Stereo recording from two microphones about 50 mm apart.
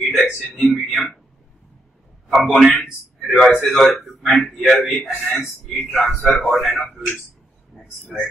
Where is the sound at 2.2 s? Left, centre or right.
Centre.